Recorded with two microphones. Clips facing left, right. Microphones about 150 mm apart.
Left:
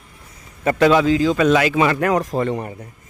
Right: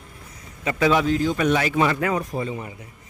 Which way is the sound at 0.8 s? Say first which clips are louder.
Left 5 dB; 85° left.